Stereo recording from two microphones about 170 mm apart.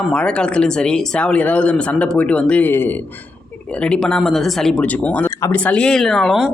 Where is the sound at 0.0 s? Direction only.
5° left (ahead or behind).